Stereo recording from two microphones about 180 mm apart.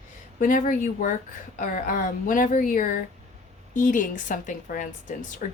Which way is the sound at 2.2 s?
50° left (ahead or behind).